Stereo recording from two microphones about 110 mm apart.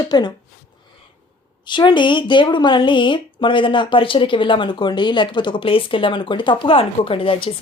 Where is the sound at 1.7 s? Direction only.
45° left (ahead or behind).